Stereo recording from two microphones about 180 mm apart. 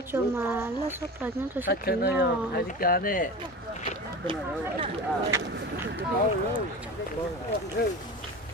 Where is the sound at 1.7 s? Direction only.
55° left (ahead or behind).